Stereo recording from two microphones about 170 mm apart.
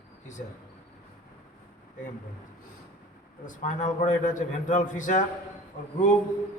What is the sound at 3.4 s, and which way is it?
A man's voice, 45° left (ahead or behind).